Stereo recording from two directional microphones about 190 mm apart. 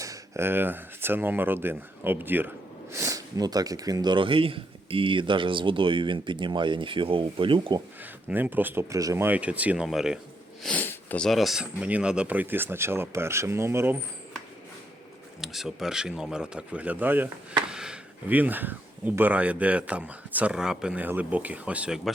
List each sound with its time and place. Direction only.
0.0 s speech: 15° right (ahead or behind)
8.3 s speech: 10° right (ahead or behind)
15.4 s speech: centre (ahead or behind)